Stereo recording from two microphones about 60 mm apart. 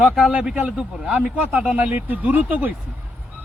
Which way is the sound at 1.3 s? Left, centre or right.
Right.